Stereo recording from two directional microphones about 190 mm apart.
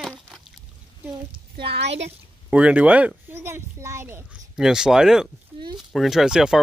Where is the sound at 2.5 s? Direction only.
5° right (ahead or behind).